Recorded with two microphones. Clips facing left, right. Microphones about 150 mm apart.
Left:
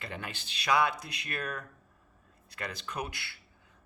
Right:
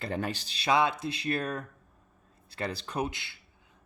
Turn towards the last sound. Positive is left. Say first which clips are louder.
# right 5 dB
turn(degrees=-20)  # may be behind; listen again after turning